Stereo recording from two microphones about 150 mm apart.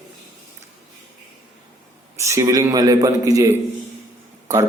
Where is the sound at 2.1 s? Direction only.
20° right (ahead or behind).